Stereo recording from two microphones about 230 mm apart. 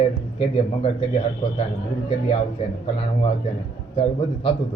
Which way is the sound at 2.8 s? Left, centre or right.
Left.